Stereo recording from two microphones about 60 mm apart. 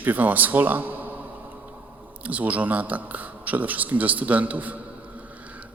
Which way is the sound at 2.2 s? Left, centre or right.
Right.